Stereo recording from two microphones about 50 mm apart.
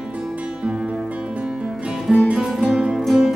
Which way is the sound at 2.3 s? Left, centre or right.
Centre.